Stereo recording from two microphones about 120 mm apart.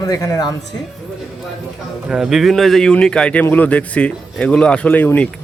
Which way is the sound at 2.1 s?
5° right (ahead or behind).